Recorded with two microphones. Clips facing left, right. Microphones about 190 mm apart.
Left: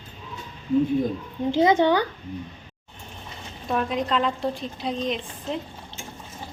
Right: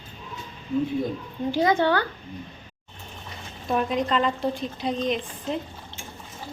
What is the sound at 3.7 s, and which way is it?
A woman's voice, centre (ahead or behind).